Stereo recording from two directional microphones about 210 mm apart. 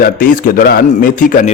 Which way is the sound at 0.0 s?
40° left (ahead or behind).